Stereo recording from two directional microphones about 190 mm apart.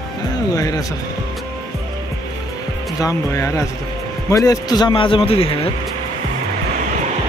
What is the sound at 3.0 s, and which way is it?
A man's voice, 15° left (ahead or behind).